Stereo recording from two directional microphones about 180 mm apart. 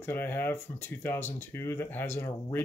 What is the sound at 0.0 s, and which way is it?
Speech, 10° left (ahead or behind).